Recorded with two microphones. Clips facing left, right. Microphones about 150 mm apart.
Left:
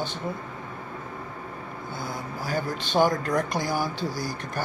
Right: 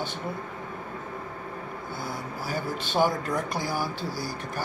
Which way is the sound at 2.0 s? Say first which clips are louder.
Left 2 dB; 5° right (ahead or behind).